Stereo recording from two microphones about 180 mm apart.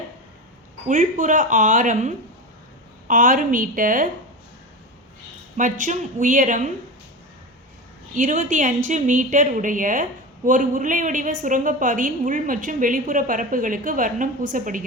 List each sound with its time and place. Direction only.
0.9 s a woman's voice: 45° right (ahead or behind)
5.5 s a woman's voice: 45° right (ahead or behind)
8.1 s a woman's voice: 45° right (ahead or behind)